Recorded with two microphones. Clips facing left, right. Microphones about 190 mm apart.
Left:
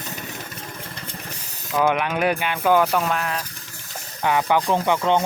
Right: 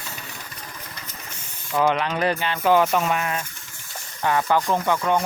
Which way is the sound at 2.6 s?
5° right (ahead or behind).